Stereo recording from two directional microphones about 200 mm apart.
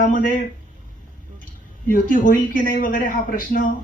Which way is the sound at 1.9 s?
45° left (ahead or behind).